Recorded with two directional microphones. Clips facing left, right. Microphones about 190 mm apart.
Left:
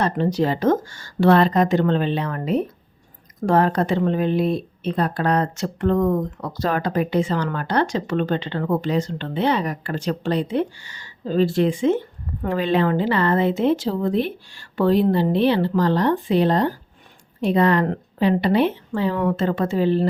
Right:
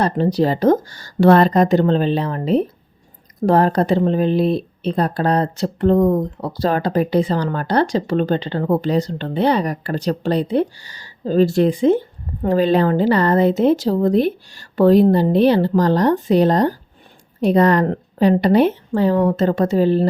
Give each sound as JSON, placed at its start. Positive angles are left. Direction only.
{"t": 0.0, "sound": "speech", "side_deg": -35}